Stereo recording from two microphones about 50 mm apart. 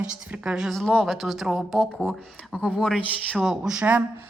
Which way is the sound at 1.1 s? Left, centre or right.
Centre.